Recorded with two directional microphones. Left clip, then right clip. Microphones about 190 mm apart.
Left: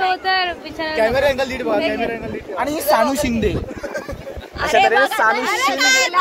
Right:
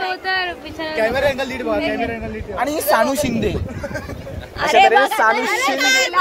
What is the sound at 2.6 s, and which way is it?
A woman's voice, 45° right (ahead or behind).